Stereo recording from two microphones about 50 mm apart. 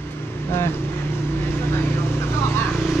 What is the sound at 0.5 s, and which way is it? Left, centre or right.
Vehicle, left.